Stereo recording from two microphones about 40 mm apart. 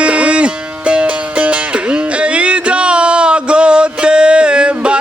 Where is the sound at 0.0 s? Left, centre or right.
Right.